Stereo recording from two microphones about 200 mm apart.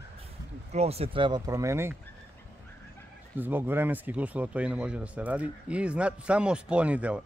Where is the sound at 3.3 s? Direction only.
10° right (ahead or behind).